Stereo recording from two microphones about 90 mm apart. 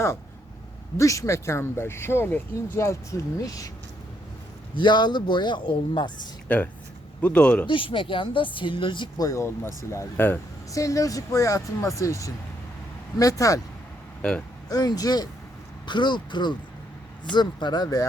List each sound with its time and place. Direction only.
0.9 s speech: 35° left (ahead or behind)
4.7 s speech: 60° left (ahead or behind)
6.5 s speech: 15° left (ahead or behind)
7.7 s speech: 70° left (ahead or behind)
9.1 s speech: 40° left (ahead or behind)
10.2 s speech: 20° left (ahead or behind)
10.7 s speech: 40° left (ahead or behind)
14.2 s speech: 15° left (ahead or behind)
14.7 s speech: 45° left (ahead or behind)
15.9 s speech: 60° left (ahead or behind)